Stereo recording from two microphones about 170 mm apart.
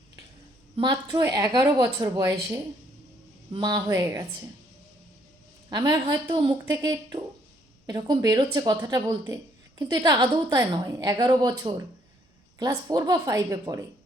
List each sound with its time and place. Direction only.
0.8 s speech: 25° right (ahead or behind)
5.7 s speech: 25° right (ahead or behind)
7.9 s speech: 25° right (ahead or behind)